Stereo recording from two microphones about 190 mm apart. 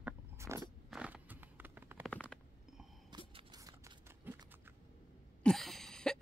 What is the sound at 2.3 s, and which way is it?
Stomach rumble, 5° left (ahead or behind).